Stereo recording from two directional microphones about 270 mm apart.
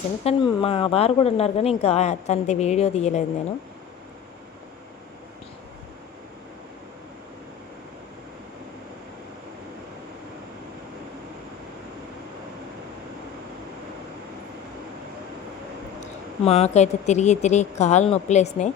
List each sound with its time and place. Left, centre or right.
0.3 s a woman's voice: centre
16.4 s a woman's voice: left